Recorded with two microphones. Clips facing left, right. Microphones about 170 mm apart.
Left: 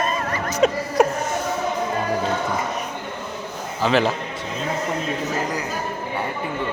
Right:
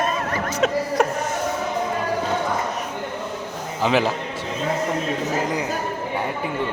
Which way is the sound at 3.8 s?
15° right (ahead or behind).